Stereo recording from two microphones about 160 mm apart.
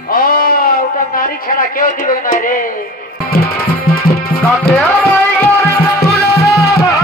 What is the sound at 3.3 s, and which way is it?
Music, 70° left (ahead or behind).